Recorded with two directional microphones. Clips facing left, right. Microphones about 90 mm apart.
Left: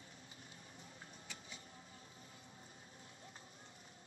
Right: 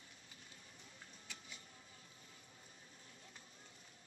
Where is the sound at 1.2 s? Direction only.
30° left (ahead or behind).